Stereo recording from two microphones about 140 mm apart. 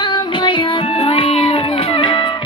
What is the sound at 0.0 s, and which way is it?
Music, 35° left (ahead or behind).